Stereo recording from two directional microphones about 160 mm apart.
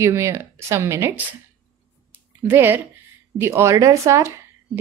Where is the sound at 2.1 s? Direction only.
10° right (ahead or behind).